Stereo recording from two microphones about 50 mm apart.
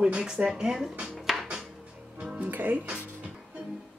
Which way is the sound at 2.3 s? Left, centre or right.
Right.